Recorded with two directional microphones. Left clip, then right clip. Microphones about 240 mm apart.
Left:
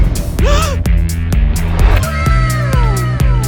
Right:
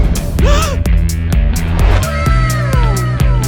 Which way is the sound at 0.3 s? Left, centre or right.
Centre.